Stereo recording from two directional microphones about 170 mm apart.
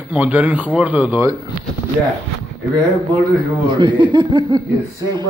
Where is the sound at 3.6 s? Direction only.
25° right (ahead or behind).